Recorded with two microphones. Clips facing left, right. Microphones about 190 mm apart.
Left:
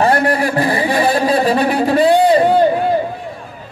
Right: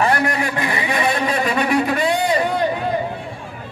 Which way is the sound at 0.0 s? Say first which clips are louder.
Left 5 dB; 35° left (ahead or behind).